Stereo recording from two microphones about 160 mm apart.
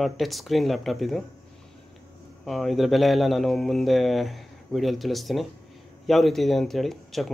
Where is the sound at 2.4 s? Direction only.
Centre (ahead or behind).